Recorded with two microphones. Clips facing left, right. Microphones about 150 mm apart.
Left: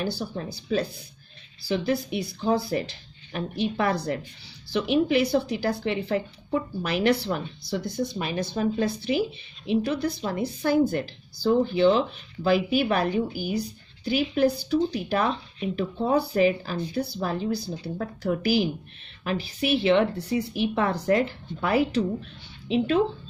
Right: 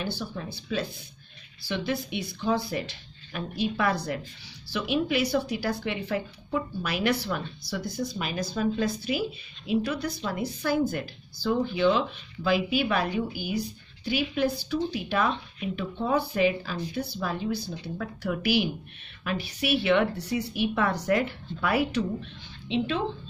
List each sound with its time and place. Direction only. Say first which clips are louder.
0.0 s a woman's voice: left 3 dB; 40° left (ahead or behind)